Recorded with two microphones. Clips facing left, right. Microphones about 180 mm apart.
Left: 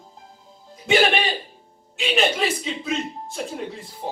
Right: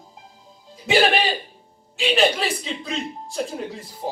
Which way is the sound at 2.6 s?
5° left (ahead or behind).